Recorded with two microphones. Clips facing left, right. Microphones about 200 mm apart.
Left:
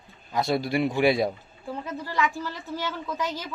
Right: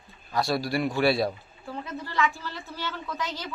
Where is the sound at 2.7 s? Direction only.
15° left (ahead or behind).